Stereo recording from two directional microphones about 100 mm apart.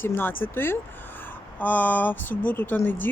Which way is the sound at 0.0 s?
20° left (ahead or behind).